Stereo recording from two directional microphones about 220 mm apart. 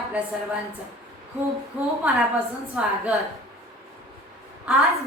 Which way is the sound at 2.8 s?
5° right (ahead or behind).